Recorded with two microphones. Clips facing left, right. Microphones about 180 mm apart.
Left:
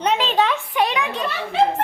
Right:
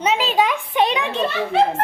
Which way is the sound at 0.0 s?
5° right (ahead or behind).